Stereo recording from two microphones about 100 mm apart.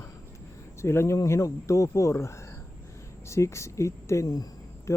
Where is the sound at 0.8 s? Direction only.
25° left (ahead or behind).